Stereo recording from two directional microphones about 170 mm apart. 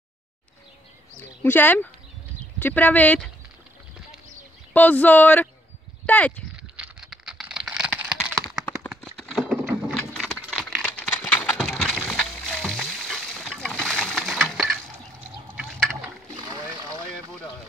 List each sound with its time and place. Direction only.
1.4 s speech: 10° left (ahead or behind)
4.7 s speech: 10° left (ahead or behind)
6.8 s a sound: 5° right (ahead or behind)
16.3 s vehicle: 25° right (ahead or behind)